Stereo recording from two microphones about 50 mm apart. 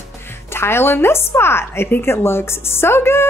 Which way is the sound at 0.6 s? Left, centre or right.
Left.